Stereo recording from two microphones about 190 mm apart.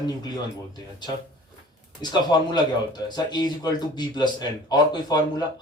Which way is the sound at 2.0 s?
20° left (ahead or behind).